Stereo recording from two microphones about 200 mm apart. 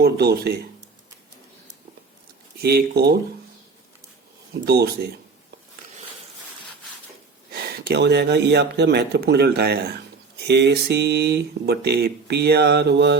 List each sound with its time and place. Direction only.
0.0 s speech: 50° right (ahead or behind)
2.6 s speech: 50° right (ahead or behind)
4.6 s speech: 50° right (ahead or behind)
7.5 s speech: 55° right (ahead or behind)